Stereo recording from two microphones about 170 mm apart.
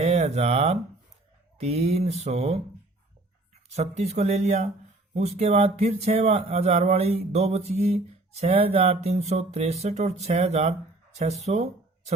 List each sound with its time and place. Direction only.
0.0 s speech: 40° right (ahead or behind)
1.5 s a sound: 40° right (ahead or behind)
11.2 s speech: 40° right (ahead or behind)